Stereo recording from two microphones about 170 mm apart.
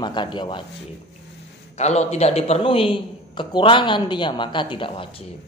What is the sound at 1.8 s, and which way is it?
Speech, 40° left (ahead or behind).